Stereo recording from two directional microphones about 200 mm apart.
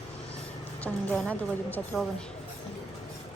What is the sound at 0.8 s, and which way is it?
A woman's voice, 5° left (ahead or behind).